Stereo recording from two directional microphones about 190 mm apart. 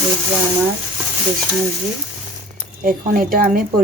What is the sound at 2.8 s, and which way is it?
Speech, 50° right (ahead or behind).